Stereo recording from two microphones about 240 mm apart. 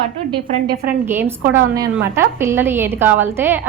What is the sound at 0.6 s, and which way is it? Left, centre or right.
Speech, right.